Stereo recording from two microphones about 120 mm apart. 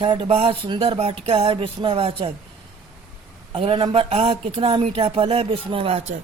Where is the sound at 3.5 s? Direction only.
50° right (ahead or behind).